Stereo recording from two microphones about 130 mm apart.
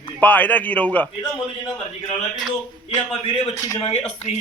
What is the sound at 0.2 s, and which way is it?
Speech, 15° left (ahead or behind).